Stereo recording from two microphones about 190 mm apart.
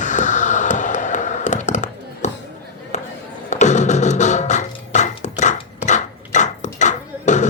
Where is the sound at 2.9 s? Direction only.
40° left (ahead or behind).